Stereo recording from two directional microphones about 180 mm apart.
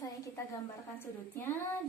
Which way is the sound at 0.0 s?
15° left (ahead or behind).